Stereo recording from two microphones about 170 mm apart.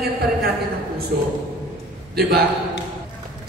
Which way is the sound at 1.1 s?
65° right (ahead or behind).